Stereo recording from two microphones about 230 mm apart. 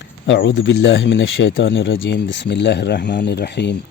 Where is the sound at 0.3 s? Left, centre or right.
Left.